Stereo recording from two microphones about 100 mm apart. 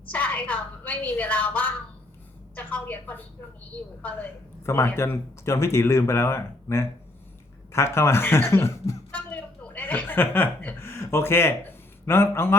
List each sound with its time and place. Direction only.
0.1 s a woman's voice: 15° left (ahead or behind)
9.1 s chuckle: 15° left (ahead or behind)
12.0 s speech: 25° left (ahead or behind)